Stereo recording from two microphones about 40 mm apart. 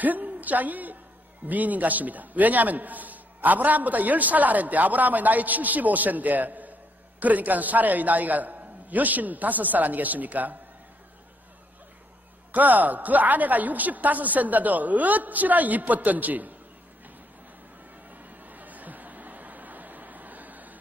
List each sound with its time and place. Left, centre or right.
0.0 s a woman's voice: right
12.5 s a man's voice: right
18.1 s a sound: right